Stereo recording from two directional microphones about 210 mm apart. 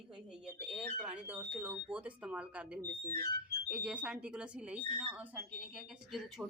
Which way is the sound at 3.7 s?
5° right (ahead or behind).